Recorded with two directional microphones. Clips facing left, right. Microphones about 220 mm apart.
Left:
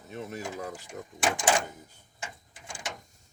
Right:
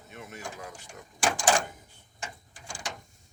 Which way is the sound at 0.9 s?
20° left (ahead or behind).